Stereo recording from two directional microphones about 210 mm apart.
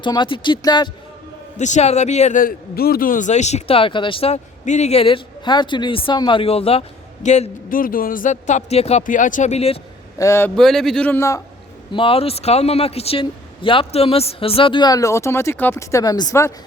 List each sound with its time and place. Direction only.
0.0 s a man's voice: 20° left (ahead or behind)
1.5 s a man's voice: 35° left (ahead or behind)
10.2 s a man's voice: 15° left (ahead or behind)
11.9 s a man's voice: 25° left (ahead or behind)